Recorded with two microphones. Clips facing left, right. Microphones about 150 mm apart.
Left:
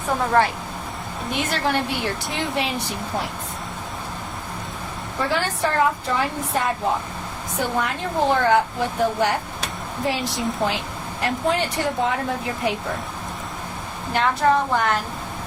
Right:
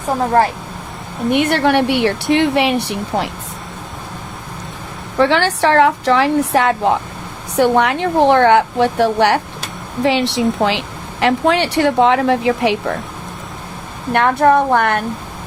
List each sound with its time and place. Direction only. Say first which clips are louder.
1.3 s speech: right 10 dB; 65° right (ahead or behind)
5.1 s speech: right 10 dB; 80° right
14.1 s a woman's voice: right 7 dB; 60° right (ahead or behind)